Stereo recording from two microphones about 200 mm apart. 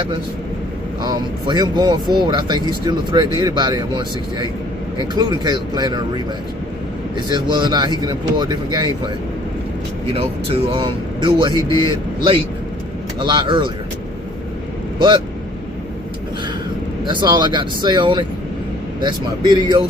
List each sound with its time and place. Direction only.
1.0 s speech: 20° right (ahead or behind)
7.3 s speech: 20° right (ahead or behind)
10.2 s speech: 25° right (ahead or behind)
14.9 s speech: 20° right (ahead or behind)
17.1 s speech: 20° right (ahead or behind)